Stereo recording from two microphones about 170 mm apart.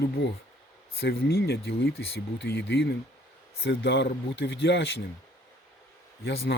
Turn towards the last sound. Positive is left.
turn(degrees=90)